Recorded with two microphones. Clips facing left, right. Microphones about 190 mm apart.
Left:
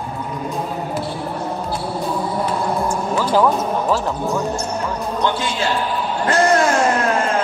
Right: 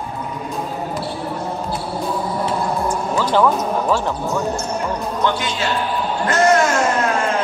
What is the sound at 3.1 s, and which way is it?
Speech, 10° left (ahead or behind).